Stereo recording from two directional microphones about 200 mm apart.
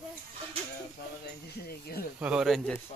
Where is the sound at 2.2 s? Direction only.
5° right (ahead or behind).